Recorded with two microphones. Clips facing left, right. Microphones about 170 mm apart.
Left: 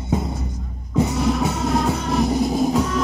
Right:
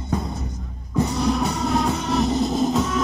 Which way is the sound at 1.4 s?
5° left (ahead or behind).